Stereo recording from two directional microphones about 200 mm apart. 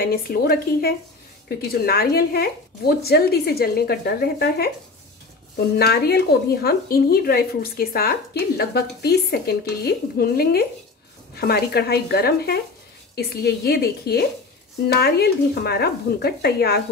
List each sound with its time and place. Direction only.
0.0 s a woman's voice: 50° left (ahead or behind)
5.8 s a woman's voice: 50° left (ahead or behind)